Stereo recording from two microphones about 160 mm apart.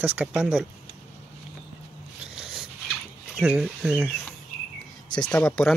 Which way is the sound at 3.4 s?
5° right (ahead or behind).